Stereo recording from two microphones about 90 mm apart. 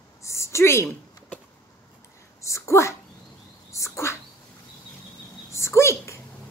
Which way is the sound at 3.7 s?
35° left (ahead or behind).